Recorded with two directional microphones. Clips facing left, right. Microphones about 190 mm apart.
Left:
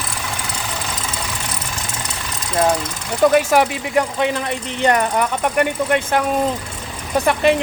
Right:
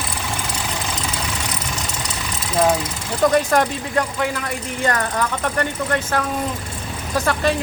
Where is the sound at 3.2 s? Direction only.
10° left (ahead or behind).